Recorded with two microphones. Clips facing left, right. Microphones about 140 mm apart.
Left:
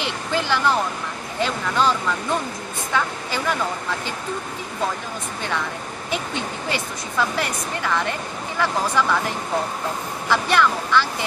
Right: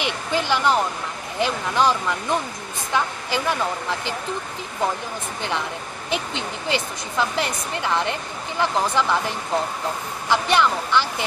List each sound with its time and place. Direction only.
0.0 s speech: 15° right (ahead or behind)
6.0 s speech: 20° right (ahead or behind)
10.3 s speech: 20° right (ahead or behind)